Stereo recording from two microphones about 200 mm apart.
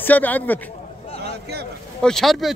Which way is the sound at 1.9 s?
Centre (ahead or behind).